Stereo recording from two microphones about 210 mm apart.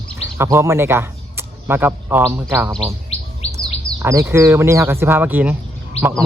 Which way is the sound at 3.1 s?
30° left (ahead or behind).